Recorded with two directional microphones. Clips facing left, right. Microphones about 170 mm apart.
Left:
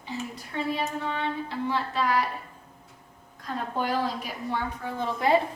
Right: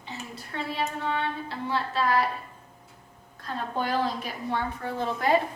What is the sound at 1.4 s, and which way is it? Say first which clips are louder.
Speech: left 1 dB; 15° left (ahead or behind).